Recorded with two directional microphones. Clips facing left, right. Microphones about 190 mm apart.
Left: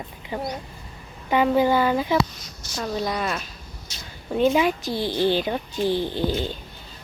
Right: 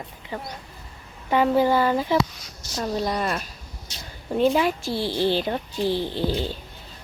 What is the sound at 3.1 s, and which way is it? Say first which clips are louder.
Speech: right 1 dB; 35° right (ahead or behind).